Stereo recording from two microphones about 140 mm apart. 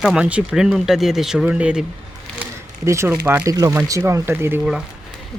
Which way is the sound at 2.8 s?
20° right (ahead or behind).